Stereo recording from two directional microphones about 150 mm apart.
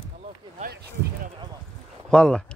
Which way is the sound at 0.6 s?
80° right.